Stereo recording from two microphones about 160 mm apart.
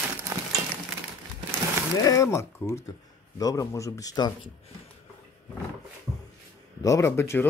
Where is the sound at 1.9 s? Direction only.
20° left (ahead or behind).